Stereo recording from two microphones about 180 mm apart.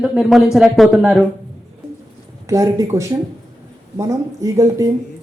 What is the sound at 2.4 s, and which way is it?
Speech, 20° right (ahead or behind).